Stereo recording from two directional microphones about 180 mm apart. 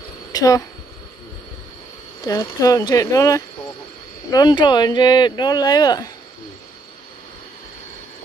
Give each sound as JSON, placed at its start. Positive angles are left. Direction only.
{"t": 0.3, "sound": "speech", "side_deg": 20}
{"t": 2.2, "sound": "speech", "side_deg": 20}